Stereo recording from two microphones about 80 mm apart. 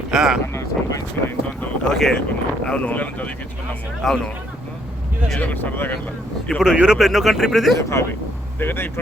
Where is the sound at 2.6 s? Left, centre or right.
Centre.